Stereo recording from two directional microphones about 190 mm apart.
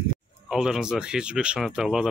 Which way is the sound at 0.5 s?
5° right (ahead or behind).